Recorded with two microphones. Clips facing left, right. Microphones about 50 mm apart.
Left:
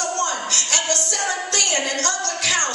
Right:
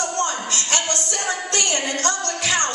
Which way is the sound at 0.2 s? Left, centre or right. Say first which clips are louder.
Even; right.